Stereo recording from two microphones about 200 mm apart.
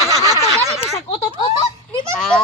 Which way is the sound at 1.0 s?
25° left (ahead or behind).